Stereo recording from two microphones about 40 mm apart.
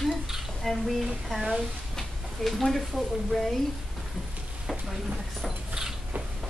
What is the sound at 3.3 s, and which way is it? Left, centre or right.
Speech, centre.